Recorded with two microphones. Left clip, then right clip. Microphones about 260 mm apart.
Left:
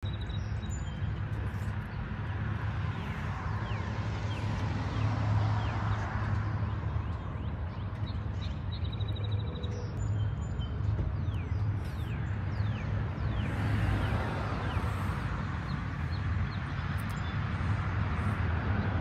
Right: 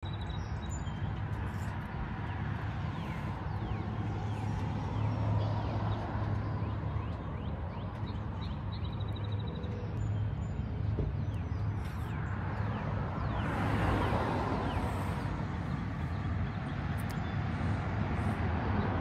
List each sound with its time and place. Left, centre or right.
13.5 s vehicle: right
17.4 s vehicle: right